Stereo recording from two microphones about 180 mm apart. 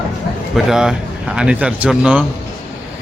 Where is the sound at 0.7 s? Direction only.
5° right (ahead or behind).